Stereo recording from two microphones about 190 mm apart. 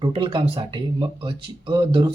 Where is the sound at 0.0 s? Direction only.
25° right (ahead or behind).